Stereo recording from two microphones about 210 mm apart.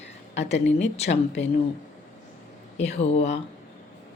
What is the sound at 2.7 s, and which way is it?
Speech, 30° left (ahead or behind).